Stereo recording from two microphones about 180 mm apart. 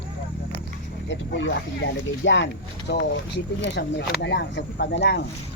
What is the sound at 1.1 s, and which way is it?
Speech, 90° left.